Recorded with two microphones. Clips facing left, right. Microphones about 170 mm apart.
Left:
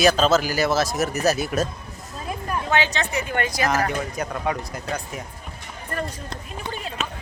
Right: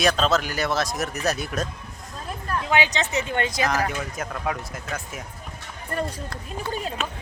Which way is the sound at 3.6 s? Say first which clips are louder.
Left 2 dB; centre (ahead or behind).